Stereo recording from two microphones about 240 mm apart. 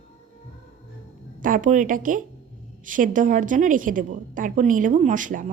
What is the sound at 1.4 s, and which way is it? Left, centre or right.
A woman's voice, right.